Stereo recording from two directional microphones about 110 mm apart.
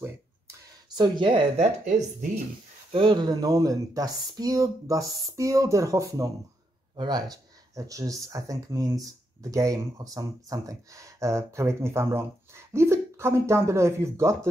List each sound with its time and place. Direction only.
0.9 s speech: 40° right (ahead or behind)
2.9 s speech: 50° right (ahead or behind); by 14.5 s 25° right (ahead or behind)